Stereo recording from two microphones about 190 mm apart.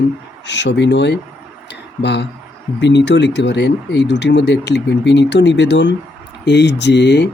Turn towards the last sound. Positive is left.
turn(degrees=65)  # may be behind; listen again after turning